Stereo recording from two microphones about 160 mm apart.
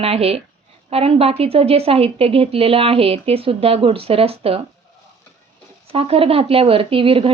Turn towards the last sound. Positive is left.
turn(degrees=-35)  # may be behind; listen again after turning